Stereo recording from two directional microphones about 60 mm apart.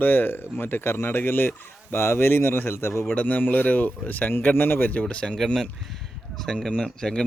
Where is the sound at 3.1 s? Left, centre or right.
Left.